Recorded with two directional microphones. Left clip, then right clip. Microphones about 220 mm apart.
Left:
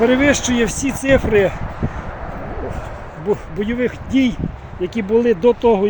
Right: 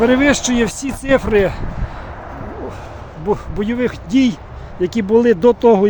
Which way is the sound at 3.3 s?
10° right (ahead or behind).